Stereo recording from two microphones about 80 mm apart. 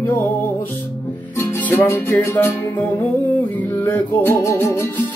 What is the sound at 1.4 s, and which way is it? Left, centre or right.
Music, left.